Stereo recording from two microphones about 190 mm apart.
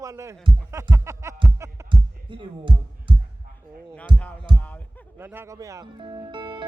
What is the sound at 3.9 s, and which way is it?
Speech, 5° left (ahead or behind).